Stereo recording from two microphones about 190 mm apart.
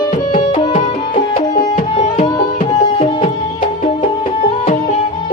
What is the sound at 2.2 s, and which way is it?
Music, 25° left (ahead or behind).